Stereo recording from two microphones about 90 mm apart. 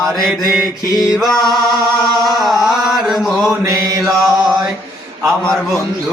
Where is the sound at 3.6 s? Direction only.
35° right (ahead or behind).